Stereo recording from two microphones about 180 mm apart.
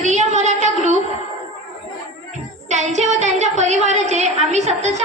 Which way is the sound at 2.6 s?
40° right (ahead or behind).